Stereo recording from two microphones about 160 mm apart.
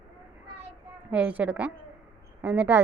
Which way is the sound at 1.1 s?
10° right (ahead or behind).